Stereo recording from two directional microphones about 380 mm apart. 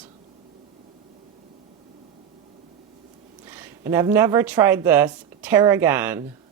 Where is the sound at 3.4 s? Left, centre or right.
Centre.